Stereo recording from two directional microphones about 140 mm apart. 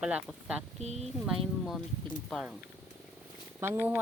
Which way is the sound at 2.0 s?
Centre (ahead or behind).